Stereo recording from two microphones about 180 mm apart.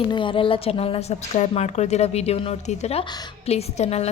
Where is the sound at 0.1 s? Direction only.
25° left (ahead or behind).